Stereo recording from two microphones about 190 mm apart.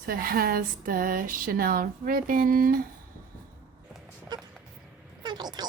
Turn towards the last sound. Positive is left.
turn(degrees=-20)  # may be behind; listen again after turning